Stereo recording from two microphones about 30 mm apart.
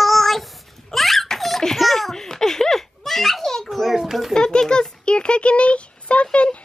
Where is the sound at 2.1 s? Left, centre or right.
Centre.